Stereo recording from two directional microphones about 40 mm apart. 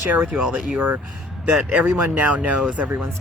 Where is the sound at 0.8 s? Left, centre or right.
Right.